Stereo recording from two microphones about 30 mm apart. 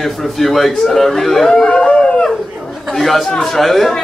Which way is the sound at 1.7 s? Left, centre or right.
Left.